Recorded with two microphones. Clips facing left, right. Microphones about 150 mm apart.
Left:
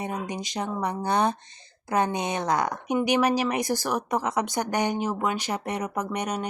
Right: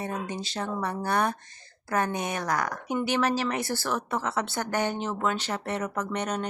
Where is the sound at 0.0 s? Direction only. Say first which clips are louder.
Left 1 dB; 15° left (ahead or behind).